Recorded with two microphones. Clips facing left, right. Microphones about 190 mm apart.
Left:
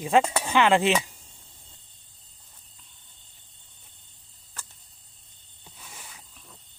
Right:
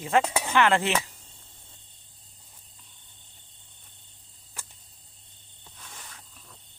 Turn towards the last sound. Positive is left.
turn(degrees=10)  # may be behind; listen again after turning